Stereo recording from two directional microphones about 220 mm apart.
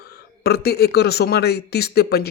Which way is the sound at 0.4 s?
45° left (ahead or behind).